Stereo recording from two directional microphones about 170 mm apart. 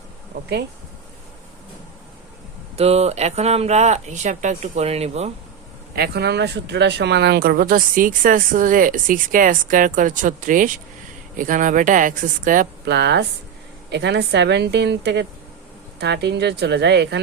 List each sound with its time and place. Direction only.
2.7 s speech: 40° right (ahead or behind)
6.0 s speech: 75° right (ahead or behind); by 12.6 s 50° right (ahead or behind)
12.8 s a woman's voice: 85° right